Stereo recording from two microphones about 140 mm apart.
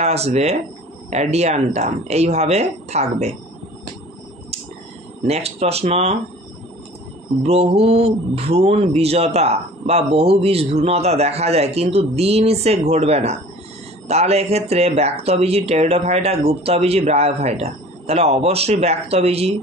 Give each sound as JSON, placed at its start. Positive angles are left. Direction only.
{"t": 0.0, "sound": "speech", "side_deg": -50}
{"t": 5.2, "sound": "speech", "side_deg": -50}
{"t": 7.4, "sound": "speech", "side_deg": -45}